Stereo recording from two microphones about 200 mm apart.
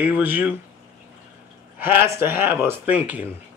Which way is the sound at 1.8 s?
10° right (ahead or behind).